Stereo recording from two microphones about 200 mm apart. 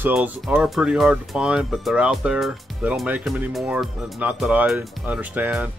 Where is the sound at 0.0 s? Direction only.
10° right (ahead or behind).